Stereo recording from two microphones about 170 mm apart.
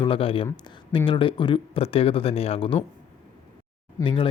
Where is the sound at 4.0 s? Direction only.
20° left (ahead or behind).